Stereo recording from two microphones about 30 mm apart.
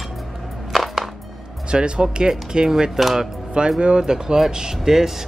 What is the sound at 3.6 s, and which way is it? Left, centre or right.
Speech, right.